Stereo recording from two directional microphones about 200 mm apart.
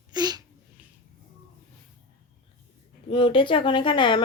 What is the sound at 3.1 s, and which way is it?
Speech, 25° left (ahead or behind).